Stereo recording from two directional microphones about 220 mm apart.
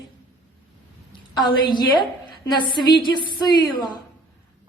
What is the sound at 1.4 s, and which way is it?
A woman's voice, 20° left (ahead or behind).